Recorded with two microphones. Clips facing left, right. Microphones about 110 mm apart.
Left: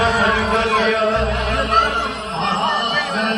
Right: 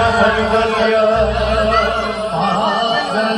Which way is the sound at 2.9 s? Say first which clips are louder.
Right 5 dB; 30° right (ahead or behind).